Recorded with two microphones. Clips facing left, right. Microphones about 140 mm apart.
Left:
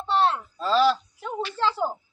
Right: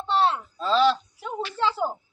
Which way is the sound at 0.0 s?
Centre (ahead or behind).